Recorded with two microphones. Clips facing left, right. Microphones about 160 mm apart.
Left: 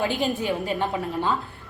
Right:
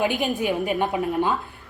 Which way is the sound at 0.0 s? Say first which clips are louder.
Right 2 dB; 15° right (ahead or behind).